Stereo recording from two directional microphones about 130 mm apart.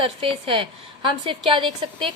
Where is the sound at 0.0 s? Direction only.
45° right (ahead or behind).